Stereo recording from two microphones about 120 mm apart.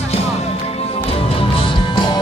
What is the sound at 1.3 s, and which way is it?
Music, 45° left (ahead or behind).